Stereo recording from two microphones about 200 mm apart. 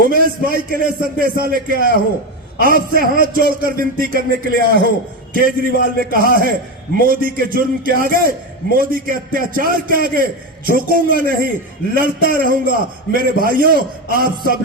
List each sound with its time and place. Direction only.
0.1 s a man's voice: 45° right (ahead or behind)